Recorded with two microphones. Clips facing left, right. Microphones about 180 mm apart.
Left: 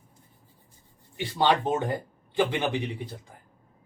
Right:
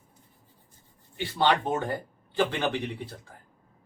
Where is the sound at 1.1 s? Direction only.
20° left (ahead or behind).